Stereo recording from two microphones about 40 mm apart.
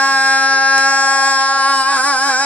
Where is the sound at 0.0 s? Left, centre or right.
Left.